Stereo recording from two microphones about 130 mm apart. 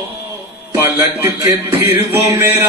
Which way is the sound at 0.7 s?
20° right (ahead or behind).